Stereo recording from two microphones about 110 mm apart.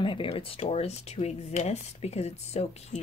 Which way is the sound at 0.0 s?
50° left (ahead or behind).